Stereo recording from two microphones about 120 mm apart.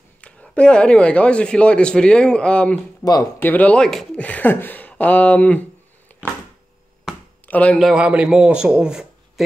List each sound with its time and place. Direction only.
0.2 s a man's voice: 10° left (ahead or behind)
3.0 s speech: 30° left (ahead or behind)
3.3 s a man's voice: 15° left (ahead or behind)
4.2 s speech: 15° left (ahead or behind)
7.4 s speech: 10° left (ahead or behind)
7.8 s a man's voice: 5° right (ahead or behind)